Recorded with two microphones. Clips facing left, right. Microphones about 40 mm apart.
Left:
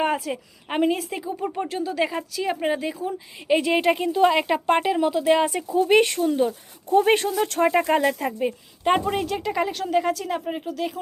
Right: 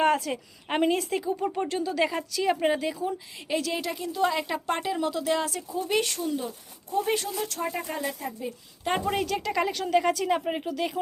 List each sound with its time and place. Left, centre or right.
0.0 s speech: centre
3.4 s a woman's voice: left
5.5 s speech: left
6.9 s speech: left
7.6 s speech: left
9.0 s speech: centre
10.2 s speech: centre